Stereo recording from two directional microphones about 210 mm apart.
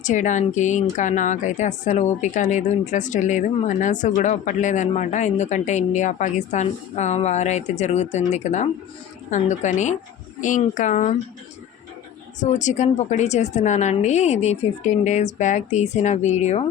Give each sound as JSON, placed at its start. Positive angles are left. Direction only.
{"t": 0.0, "sound": "speech", "side_deg": 35}
{"t": 12.4, "sound": "speech", "side_deg": 35}